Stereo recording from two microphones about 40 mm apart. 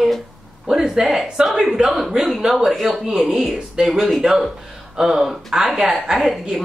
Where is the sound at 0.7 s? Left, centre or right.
Centre.